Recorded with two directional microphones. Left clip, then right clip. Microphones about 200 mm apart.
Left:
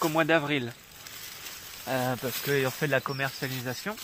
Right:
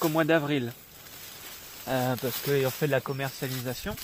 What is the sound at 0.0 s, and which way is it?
Speech, 35° right (ahead or behind).